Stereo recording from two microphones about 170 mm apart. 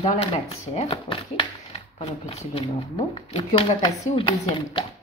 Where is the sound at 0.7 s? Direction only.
30° left (ahead or behind).